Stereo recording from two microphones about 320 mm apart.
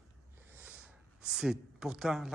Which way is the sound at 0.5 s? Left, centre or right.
Centre.